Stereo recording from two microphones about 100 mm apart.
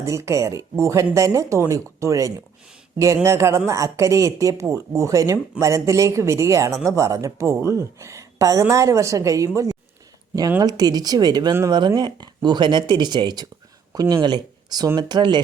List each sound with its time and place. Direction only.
0.0 s speech: 30° right (ahead or behind)
10.6 s speech: 40° right (ahead or behind)